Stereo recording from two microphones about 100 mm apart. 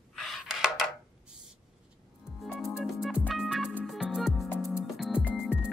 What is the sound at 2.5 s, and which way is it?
Music, 5° right (ahead or behind).